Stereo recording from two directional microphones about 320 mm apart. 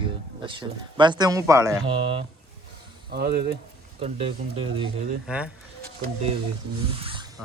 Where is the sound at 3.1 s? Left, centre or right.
Right.